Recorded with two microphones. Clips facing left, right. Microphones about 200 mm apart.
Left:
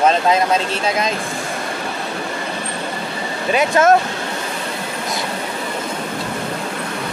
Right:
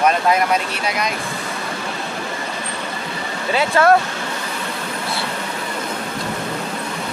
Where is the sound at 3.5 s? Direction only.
20° left (ahead or behind).